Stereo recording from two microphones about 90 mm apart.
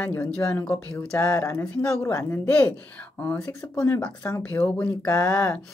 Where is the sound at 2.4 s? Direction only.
15° left (ahead or behind).